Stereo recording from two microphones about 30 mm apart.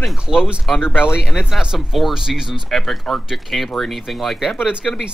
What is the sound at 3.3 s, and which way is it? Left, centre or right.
Speech, centre.